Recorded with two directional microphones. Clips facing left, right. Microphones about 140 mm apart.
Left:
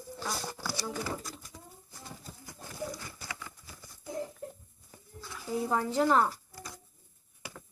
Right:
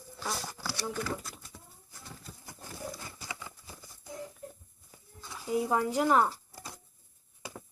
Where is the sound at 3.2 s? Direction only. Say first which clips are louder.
Even; 20° right (ahead or behind).